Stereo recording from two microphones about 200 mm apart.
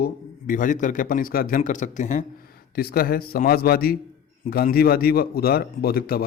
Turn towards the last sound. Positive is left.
turn(degrees=50)  # may be behind; listen again after turning